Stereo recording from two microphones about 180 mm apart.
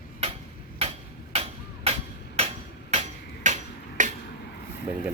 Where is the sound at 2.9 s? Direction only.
40° right (ahead or behind).